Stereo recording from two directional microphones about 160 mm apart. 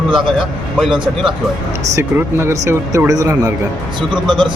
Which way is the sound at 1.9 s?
15° right (ahead or behind).